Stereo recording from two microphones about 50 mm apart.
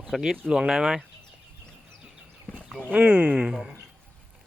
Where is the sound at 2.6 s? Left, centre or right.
Left.